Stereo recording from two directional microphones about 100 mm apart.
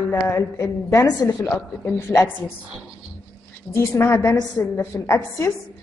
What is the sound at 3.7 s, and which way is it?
Speech, 25° left (ahead or behind).